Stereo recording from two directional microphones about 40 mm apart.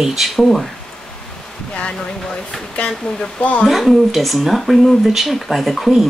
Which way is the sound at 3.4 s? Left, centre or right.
Left.